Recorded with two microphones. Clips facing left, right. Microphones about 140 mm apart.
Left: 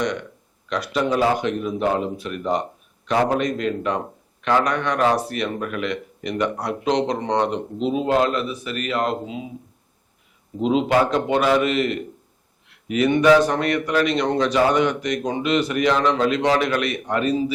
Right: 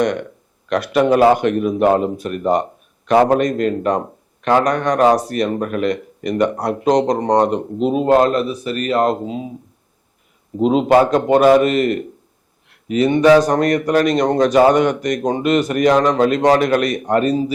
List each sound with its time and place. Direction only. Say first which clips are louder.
0.0 s a man's voice: right 6 dB; 55° right (ahead or behind)
10.6 s a man's voice: right 6 dB; 45° right (ahead or behind)
12.9 s a man's voice: right 4 dB; 35° right (ahead or behind)